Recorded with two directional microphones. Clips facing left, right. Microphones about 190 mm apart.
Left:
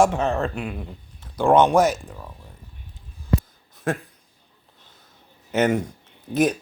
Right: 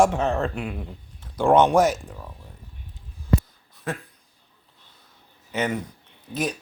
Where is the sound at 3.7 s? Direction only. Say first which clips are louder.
Left 6 dB; 45° left (ahead or behind).